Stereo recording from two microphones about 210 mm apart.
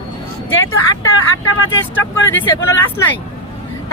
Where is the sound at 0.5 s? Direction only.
70° left (ahead or behind).